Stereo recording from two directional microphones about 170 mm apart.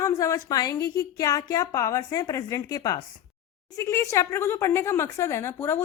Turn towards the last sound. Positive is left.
turn(degrees=15)  # may be behind; listen again after turning